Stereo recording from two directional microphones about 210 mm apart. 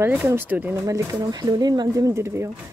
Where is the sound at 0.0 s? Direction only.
10° right (ahead or behind).